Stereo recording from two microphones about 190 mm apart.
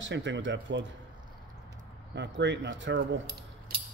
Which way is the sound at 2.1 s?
65° right (ahead or behind).